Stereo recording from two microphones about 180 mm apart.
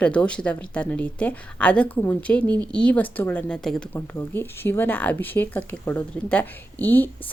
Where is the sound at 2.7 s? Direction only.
5° left (ahead or behind).